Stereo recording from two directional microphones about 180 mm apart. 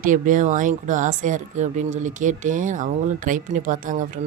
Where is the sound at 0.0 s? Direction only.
45° right (ahead or behind).